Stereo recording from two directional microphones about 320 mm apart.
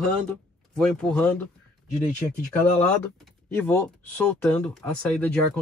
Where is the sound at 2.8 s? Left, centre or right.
Centre.